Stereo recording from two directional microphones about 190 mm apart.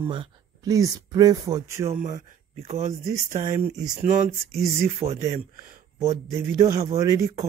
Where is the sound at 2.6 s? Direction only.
35° right (ahead or behind).